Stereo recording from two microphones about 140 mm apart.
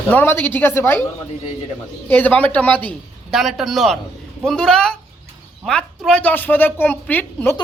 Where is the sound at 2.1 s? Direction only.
10° left (ahead or behind).